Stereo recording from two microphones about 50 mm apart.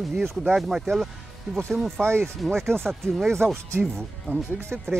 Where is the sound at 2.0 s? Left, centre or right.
Right.